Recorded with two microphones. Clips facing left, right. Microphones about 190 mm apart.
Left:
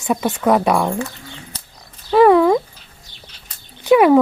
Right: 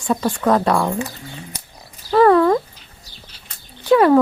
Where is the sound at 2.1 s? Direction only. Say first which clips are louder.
Left 2 dB; 15° left (ahead or behind).